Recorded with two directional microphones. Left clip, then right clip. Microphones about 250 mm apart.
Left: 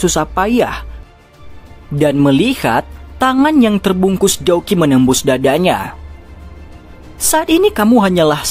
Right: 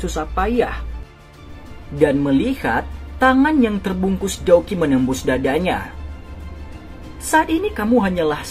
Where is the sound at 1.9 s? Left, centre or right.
Left.